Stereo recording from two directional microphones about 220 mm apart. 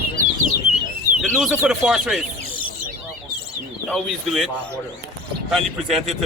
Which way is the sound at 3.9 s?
Centre (ahead or behind).